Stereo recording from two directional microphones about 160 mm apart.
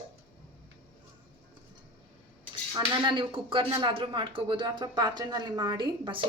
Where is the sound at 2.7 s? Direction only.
30° right (ahead or behind).